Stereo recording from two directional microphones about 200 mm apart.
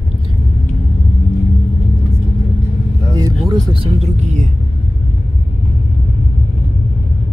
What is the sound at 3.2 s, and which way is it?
Speech, 20° right (ahead or behind).